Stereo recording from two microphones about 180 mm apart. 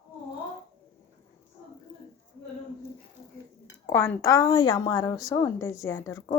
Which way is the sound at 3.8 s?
15° left (ahead or behind).